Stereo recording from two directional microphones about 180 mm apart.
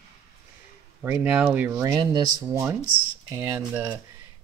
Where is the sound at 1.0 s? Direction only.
10° right (ahead or behind).